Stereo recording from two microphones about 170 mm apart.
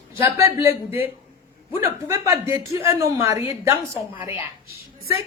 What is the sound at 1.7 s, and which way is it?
A woman's voice, 15° right (ahead or behind).